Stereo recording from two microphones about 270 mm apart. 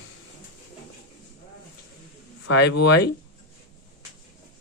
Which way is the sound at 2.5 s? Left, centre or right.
Left.